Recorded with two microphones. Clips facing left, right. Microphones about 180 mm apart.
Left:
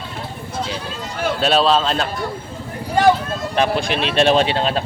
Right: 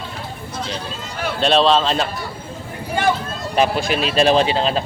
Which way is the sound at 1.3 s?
5° left (ahead or behind).